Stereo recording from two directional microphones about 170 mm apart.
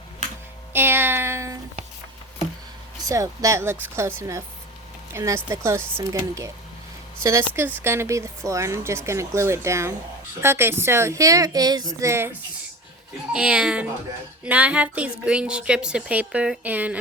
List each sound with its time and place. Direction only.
0.7 s a woman's voice: 15° right (ahead or behind)
3.1 s a woman's voice: 20° right (ahead or behind)
13.3 s a woman's voice: 5° right (ahead or behind)